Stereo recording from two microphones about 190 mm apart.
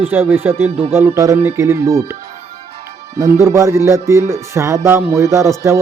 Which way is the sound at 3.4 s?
15° right (ahead or behind).